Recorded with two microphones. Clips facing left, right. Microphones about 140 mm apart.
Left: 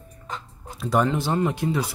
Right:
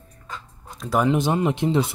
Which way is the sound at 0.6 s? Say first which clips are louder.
Left 1 dB; centre (ahead or behind).